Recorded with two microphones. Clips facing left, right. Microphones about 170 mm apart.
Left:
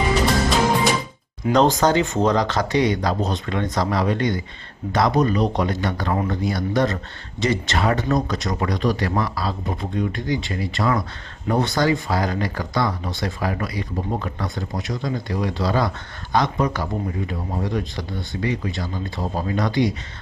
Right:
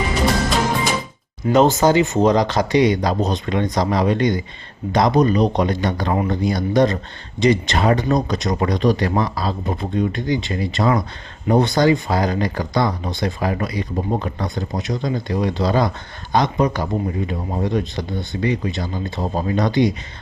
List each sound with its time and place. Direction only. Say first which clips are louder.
1.5 s speech: right 3 dB; 5° right (ahead or behind); by 19.9 s 20° right (ahead or behind)